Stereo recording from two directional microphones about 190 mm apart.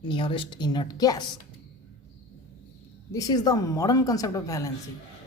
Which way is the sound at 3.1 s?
20° left (ahead or behind).